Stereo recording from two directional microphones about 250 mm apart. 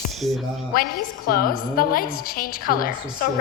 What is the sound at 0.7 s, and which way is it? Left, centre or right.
A woman's voice, left.